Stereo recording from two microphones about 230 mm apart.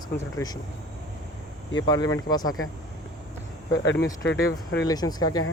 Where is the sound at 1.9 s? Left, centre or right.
Centre.